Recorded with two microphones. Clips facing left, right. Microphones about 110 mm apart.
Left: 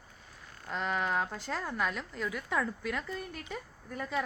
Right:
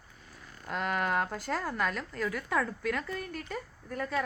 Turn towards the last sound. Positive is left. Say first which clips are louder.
# right 2 dB
turn(degrees=5)  # may be behind; listen again after turning